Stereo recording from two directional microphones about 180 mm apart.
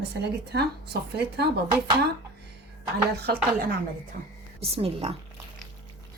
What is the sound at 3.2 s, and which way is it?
A woman's voice, 60° right (ahead or behind).